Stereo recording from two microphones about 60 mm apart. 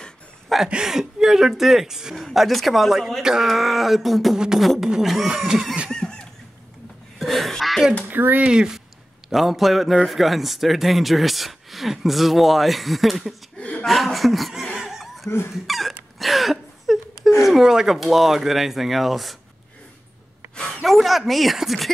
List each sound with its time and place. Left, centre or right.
0.7 s speech: centre
5.9 s a sound: centre
8.1 s speech: right
8.5 s speech: centre
9.3 s speech: centre
13.6 s a sound: centre
13.8 s speech: centre
14.8 s chuckle: centre
15.2 s dog: left
15.5 s speech: centre
16.2 s a sound: centre
17.4 s speech: centre
20.5 s a sound: centre
20.8 s speech: centre